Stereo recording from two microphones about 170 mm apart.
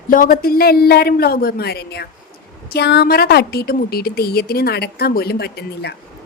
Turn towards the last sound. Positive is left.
turn(degrees=70)  # may be behind; listen again after turning